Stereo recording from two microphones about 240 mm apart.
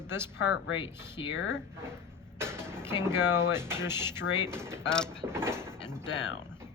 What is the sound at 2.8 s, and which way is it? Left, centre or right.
Speech, centre.